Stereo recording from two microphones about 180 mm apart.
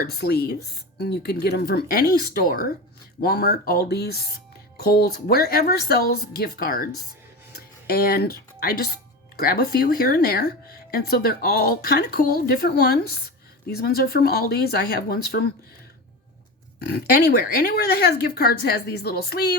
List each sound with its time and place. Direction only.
0.0 s speech: 65° left (ahead or behind)
16.8 s speech: 60° left (ahead or behind)